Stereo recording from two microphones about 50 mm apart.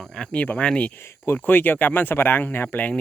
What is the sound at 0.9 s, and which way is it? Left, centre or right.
Speech, left.